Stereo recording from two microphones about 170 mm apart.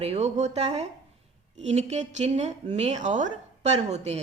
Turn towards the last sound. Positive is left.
turn(degrees=-40)  # may be behind; listen again after turning